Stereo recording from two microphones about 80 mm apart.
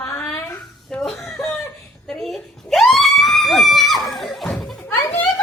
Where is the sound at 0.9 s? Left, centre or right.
Centre.